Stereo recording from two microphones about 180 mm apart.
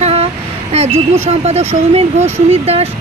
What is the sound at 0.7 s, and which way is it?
Speech, 35° right (ahead or behind).